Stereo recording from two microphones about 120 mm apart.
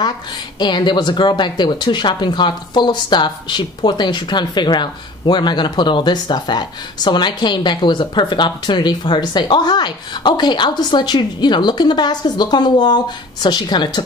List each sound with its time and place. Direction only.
0.6 s speech: 40° left (ahead or behind)